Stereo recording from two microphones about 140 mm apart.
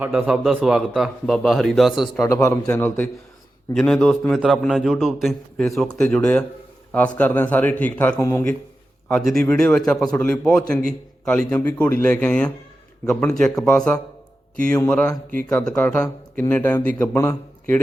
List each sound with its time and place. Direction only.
0.0 s a man's voice: 5° right (ahead or behind)
2.2 s speech: 20° left (ahead or behind)
3.8 s a man's voice: 5° left (ahead or behind); by 8.4 s 20° left (ahead or behind)
9.0 s speech: 5° left (ahead or behind)
17.2 s a man's voice: 20° left (ahead or behind)